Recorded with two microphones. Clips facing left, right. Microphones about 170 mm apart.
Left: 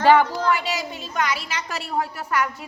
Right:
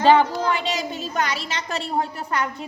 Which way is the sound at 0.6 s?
Centre (ahead or behind).